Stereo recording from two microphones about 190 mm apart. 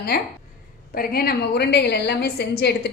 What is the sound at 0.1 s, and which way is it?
A woman's voice, 55° left (ahead or behind).